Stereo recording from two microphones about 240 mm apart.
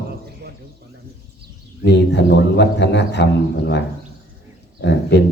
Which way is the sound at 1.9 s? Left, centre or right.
Left.